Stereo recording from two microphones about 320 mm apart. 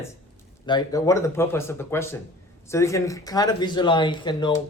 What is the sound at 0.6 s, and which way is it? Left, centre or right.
Speech, centre.